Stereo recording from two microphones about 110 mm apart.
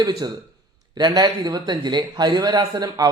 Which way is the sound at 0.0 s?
35° right (ahead or behind).